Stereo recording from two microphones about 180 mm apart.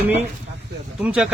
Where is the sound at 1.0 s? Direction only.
5° right (ahead or behind).